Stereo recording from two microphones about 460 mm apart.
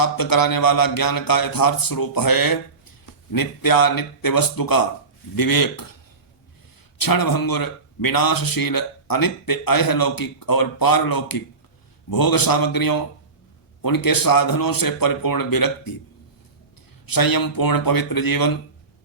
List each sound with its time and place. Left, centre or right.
0.0 s speech: left
7.0 s speech: left
17.1 s speech: left